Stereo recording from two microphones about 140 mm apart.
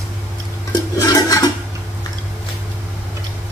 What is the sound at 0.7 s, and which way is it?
Toilet flush, 25° left (ahead or behind).